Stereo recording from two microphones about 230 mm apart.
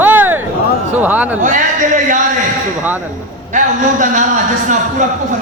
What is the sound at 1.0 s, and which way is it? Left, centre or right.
Speech, centre.